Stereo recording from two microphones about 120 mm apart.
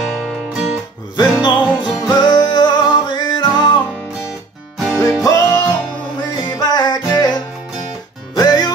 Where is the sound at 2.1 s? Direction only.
35° left (ahead or behind).